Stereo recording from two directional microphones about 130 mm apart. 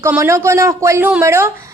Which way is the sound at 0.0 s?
20° right (ahead or behind).